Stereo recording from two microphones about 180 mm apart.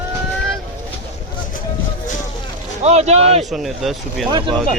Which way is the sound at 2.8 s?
35° right (ahead or behind).